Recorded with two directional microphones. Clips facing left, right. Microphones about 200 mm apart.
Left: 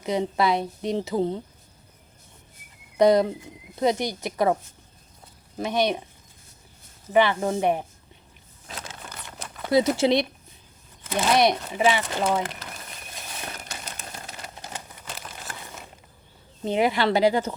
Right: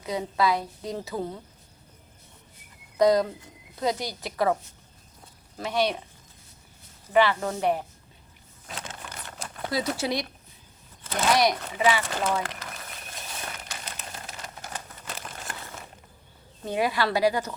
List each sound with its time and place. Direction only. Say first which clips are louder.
0.0 s speech: left 3 dB; 25° left (ahead or behind)
3.0 s speech: left 3 dB; 25° left (ahead or behind)
5.5 s speech: left 2 dB; 20° left (ahead or behind)
7.1 s speech: left 2 dB; 20° left (ahead or behind)
9.0 s patter: even; 25° left (ahead or behind)
9.7 s speech: left 8 dB; 25° left (ahead or behind)
15.0 s crumpling: even; 5° left (ahead or behind)
16.6 s speech: left 4 dB; 20° left (ahead or behind)